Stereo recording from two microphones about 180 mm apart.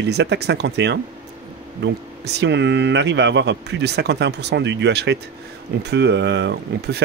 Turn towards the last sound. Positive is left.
turn(degrees=-75)  # may be behind; listen again after turning